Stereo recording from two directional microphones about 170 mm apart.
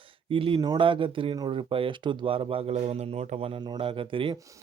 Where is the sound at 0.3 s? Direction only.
30° right (ahead or behind).